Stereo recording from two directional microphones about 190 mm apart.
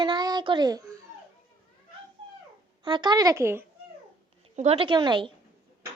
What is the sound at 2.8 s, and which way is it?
Speech, 20° right (ahead or behind).